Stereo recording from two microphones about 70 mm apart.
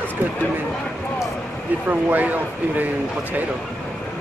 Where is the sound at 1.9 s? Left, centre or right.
Right.